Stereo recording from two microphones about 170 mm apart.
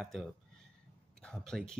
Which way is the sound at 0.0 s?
Centre (ahead or behind).